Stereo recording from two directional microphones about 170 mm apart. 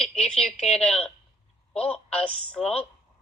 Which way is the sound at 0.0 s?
5° left (ahead or behind).